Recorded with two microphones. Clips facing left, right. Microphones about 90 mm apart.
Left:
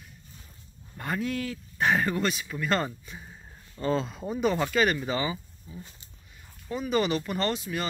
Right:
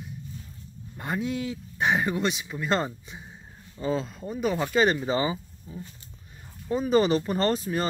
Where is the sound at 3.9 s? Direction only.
Centre (ahead or behind).